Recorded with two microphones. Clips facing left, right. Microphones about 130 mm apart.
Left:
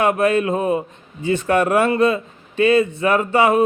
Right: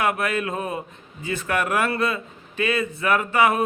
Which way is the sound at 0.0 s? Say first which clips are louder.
Left 7 dB; 30° left (ahead or behind).